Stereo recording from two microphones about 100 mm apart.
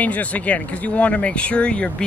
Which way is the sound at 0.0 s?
15° left (ahead or behind).